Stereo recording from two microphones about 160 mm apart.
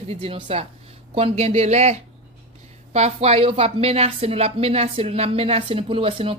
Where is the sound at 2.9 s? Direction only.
40° right (ahead or behind).